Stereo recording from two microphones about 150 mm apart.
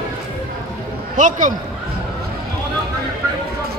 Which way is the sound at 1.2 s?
60° right (ahead or behind).